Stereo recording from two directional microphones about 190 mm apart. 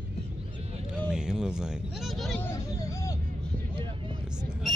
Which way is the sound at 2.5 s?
15° left (ahead or behind).